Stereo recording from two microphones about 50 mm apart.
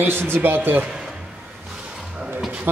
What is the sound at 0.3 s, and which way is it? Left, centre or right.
Speech, right.